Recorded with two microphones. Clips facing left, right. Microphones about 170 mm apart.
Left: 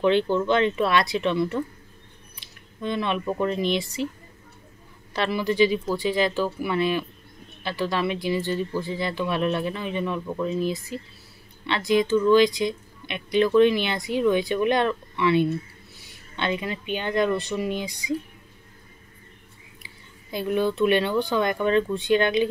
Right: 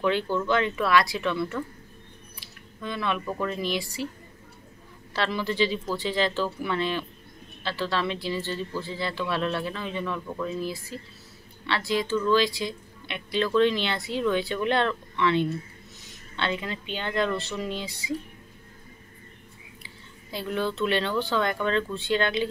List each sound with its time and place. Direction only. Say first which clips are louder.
0.0 s speech: left 5 dB; 25° left (ahead or behind)
5.1 s speech: left 3 dB; 15° left (ahead or behind)
19.8 s speech: right 1 dB; 15° left (ahead or behind)